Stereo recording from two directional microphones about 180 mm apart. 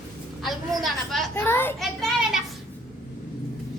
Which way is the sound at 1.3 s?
10° left (ahead or behind).